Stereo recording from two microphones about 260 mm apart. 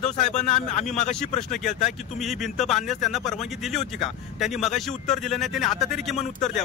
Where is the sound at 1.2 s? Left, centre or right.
Left.